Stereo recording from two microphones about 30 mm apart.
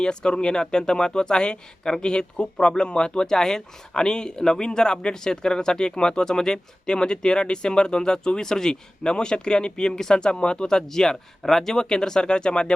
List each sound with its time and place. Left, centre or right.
0.0 s speech: left
3.2 s speech: centre
10.8 s speech: centre; by 12.7 s left